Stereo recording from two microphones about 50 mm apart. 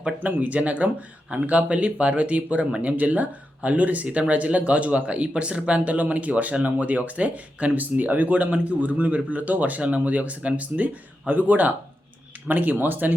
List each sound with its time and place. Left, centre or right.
0.2 s speech: right